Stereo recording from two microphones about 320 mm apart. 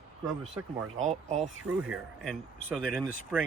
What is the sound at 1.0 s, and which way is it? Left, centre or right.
Speech, right.